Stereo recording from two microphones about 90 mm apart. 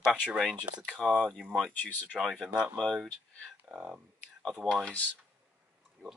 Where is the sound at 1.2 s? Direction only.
5° left (ahead or behind).